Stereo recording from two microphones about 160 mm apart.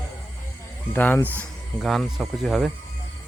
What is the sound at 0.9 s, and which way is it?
Speech, 10° left (ahead or behind).